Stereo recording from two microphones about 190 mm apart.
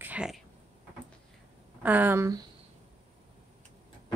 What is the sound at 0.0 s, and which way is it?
Cat, 5° right (ahead or behind).